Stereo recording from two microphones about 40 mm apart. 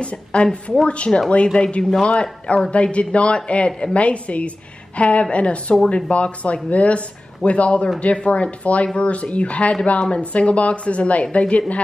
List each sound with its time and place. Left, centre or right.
0.0 s a woman's voice: left